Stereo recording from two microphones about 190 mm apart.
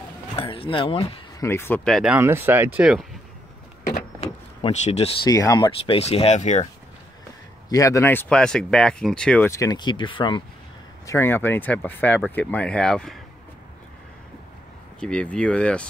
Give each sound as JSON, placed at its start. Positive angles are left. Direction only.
{"t": 0.4, "sound": "speech", "side_deg": 30}
{"t": 1.4, "sound": "speech", "side_deg": 10}
{"t": 2.1, "sound": "speech", "side_deg": -10}
{"t": 3.8, "sound": "power windows", "side_deg": 35}
{"t": 5.7, "sound": "speech", "side_deg": 30}
{"t": 7.7, "sound": "speech", "side_deg": 15}
{"t": 9.5, "sound": "speech", "side_deg": 20}
{"t": 11.1, "sound": "speech", "side_deg": 15}
{"t": 15.0, "sound": "speech", "side_deg": 5}